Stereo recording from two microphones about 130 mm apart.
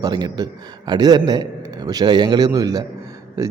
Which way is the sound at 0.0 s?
30° right (ahead or behind).